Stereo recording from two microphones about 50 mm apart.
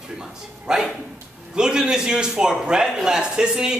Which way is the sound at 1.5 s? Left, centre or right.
Centre.